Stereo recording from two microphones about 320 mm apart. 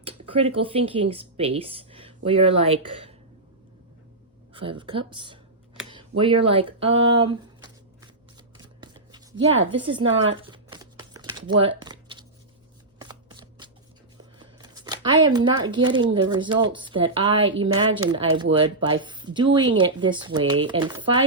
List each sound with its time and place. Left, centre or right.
0.0 s speech: centre
4.5 s speech: centre
5.9 s a sound: centre
8.5 s chopping: centre
9.8 s speech: centre
10.4 s crumpling: centre
11.8 s a sound: centre
13.0 s shuffling cards: centre
14.3 s speech: centre